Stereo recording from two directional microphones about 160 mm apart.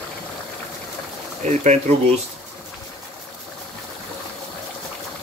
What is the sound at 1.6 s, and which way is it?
Speech, 50° right (ahead or behind).